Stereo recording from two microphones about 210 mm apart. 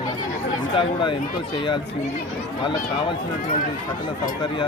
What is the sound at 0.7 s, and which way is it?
Speech, 25° left (ahead or behind).